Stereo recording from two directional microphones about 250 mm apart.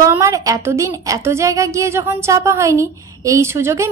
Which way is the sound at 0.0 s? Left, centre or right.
Centre.